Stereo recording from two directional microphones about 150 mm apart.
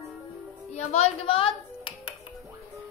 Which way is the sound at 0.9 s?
45° left (ahead or behind).